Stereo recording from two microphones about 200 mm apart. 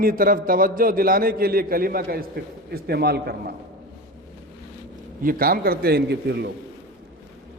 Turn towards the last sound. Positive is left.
turn(degrees=-55)  # may be behind; listen again after turning